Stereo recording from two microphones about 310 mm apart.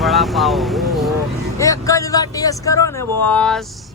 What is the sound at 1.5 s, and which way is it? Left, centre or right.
Speech, centre.